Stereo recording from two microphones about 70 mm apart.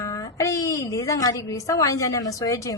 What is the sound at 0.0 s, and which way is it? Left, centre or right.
A woman's voice, left.